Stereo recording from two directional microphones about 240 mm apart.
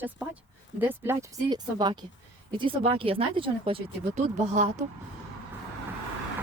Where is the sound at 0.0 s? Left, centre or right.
Centre; by 4.9 s right.